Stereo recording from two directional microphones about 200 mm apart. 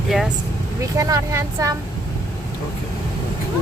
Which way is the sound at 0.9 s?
15° right (ahead or behind).